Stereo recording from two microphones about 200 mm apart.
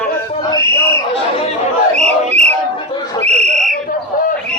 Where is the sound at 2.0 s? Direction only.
35° right (ahead or behind).